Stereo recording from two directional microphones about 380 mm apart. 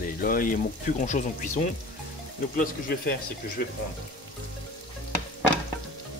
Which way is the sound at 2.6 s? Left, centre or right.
Left.